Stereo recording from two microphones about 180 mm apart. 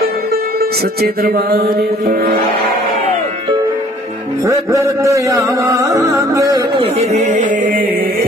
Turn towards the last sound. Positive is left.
turn(degrees=-50)  # may be behind; listen again after turning